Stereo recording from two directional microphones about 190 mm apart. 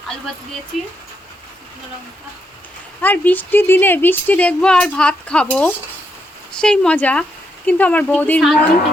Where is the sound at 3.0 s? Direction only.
10° left (ahead or behind).